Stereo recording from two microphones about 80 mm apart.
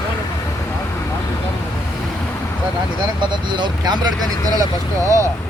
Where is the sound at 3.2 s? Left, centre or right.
Right.